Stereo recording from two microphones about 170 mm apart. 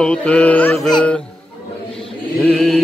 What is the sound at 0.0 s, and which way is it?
Speech, 5° left (ahead or behind).